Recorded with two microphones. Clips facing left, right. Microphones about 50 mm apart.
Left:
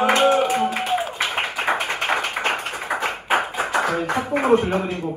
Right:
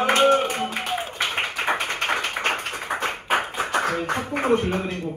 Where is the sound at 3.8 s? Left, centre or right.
Left.